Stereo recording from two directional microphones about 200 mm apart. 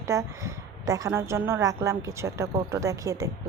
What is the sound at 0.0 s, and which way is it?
A woman's voice, 15° right (ahead or behind).